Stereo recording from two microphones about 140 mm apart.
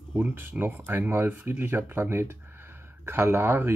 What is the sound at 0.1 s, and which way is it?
Speech, 15° right (ahead or behind).